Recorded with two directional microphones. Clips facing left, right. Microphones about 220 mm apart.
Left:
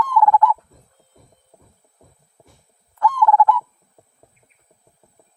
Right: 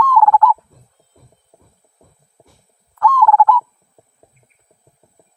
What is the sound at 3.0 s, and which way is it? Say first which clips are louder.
Fowl: right 3 dB; 15° left (ahead or behind).